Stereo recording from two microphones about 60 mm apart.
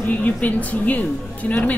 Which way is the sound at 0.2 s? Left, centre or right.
Left.